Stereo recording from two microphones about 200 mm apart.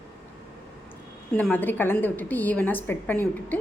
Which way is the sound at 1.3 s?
10° left (ahead or behind).